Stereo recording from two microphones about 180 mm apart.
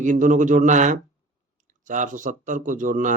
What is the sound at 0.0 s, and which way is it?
Speech, 45° right (ahead or behind).